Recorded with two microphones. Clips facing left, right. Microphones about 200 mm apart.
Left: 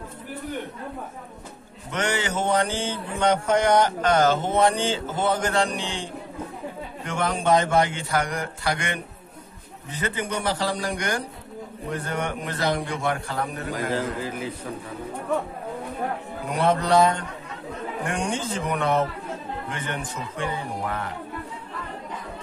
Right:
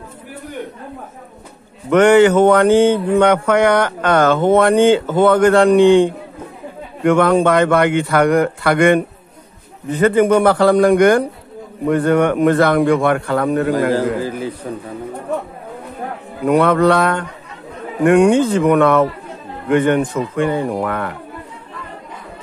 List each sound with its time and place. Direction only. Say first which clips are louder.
1.9 s speech: right 17 dB; 60° right (ahead or behind); by 13.9 s 75° right (ahead or behind)
13.9 s a man's voice: right 9 dB; 35° right (ahead or behind)
16.4 s speech: right 10 dB; 60° right (ahead or behind)